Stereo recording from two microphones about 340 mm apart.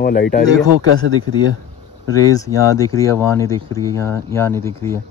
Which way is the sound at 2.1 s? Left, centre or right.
Centre.